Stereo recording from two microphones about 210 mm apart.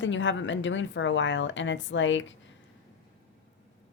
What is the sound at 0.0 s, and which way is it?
A woman's voice, 60° left (ahead or behind).